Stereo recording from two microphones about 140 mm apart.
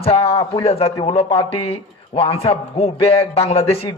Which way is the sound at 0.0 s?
45° left (ahead or behind).